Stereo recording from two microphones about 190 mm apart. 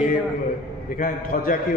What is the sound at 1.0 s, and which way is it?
Speech, 45° left (ahead or behind).